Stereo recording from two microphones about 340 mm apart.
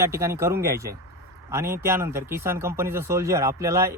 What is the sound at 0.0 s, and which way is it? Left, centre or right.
Speech, centre.